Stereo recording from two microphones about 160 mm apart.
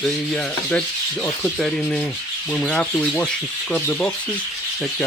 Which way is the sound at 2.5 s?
5° left (ahead or behind).